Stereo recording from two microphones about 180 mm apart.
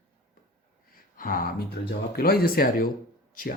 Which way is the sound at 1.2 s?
50° left (ahead or behind).